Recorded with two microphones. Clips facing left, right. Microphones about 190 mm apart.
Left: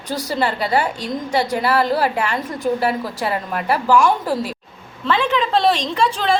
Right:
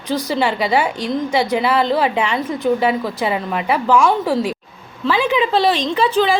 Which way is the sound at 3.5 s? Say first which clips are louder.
Left 1 dB; centre (ahead or behind).